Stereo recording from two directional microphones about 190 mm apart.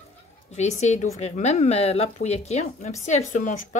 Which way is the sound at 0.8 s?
35° left (ahead or behind).